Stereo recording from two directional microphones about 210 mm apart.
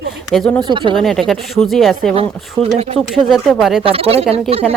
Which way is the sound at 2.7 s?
30° right (ahead or behind).